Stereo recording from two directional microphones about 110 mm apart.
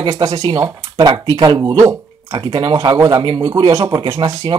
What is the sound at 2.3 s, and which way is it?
Speech, 50° right (ahead or behind).